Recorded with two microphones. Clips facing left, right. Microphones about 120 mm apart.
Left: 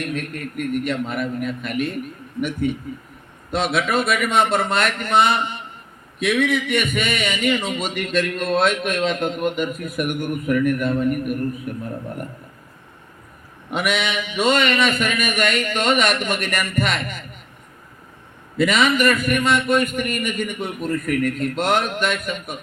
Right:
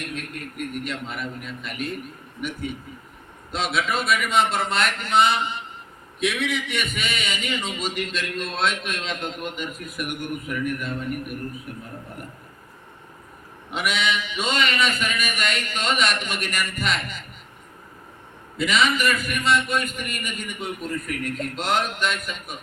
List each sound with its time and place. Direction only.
0.0 s speech: 50° left (ahead or behind)
13.7 s speech: 50° left (ahead or behind)
18.5 s speech: 50° left (ahead or behind)